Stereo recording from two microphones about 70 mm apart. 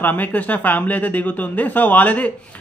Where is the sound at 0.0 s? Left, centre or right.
Left.